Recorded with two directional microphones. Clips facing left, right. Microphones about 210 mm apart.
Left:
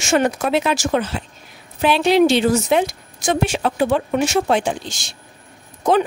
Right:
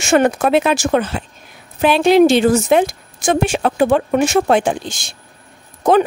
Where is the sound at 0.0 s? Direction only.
55° right (ahead or behind).